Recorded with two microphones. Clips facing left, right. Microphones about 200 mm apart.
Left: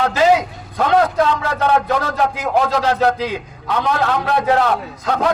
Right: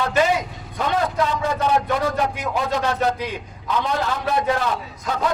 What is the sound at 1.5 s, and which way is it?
Speech, 75° left (ahead or behind).